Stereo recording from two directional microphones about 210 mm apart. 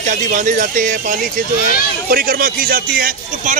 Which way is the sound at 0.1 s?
35° right (ahead or behind).